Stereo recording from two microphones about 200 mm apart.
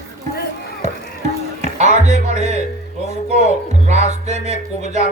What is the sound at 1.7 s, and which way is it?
Music, 35° right (ahead or behind).